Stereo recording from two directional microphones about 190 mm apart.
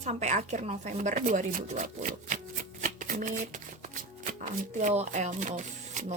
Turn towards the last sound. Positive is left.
turn(degrees=-40)  # may be behind; listen again after turning